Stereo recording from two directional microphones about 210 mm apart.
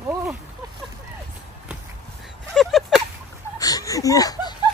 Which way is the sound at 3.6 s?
15° left (ahead or behind).